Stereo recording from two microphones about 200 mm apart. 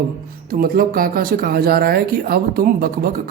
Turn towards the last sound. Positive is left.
turn(degrees=-45)  # may be behind; listen again after turning